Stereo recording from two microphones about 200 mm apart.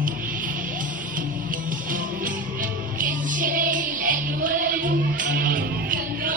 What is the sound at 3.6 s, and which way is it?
Music, 40° right (ahead or behind).